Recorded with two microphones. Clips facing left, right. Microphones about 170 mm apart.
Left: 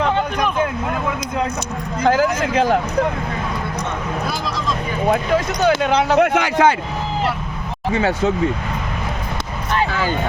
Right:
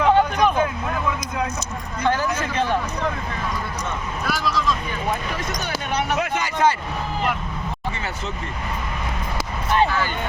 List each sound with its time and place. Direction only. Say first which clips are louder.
2.0 s speech: left 6 dB; 90° left
4.3 s speech: right 1 dB; 15° left (ahead or behind)
5.0 s speech: left 10 dB; 65° left (ahead or behind)
5.8 s speech: left 9 dB; 75° left (ahead or behind)
7.9 s speech: left 12 dB; 90° left